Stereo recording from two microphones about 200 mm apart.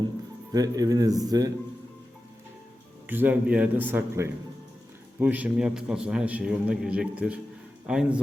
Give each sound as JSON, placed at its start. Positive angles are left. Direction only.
{"t": 0.5, "sound": "speech", "side_deg": -20}
{"t": 3.1, "sound": "a man's voice", "side_deg": -10}